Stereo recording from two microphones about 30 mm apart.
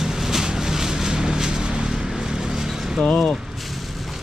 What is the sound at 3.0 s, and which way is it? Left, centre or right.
Speech, left.